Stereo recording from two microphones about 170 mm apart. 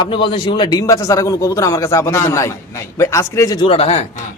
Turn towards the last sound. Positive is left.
turn(degrees=40)  # may be behind; listen again after turning